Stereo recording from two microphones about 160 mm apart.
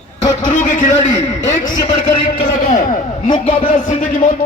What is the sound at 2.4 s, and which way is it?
A man's voice, 55° left (ahead or behind).